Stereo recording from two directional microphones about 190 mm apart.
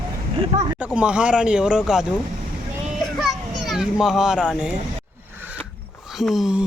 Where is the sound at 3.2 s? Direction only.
Centre (ahead or behind).